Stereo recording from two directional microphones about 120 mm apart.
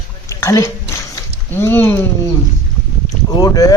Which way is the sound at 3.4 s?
30° left (ahead or behind).